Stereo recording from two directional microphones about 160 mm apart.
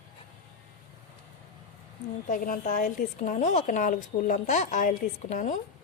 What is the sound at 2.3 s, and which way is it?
A woman's voice, 60° left (ahead or behind).